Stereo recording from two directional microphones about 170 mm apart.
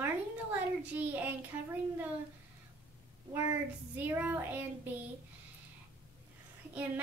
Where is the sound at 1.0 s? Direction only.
10° right (ahead or behind).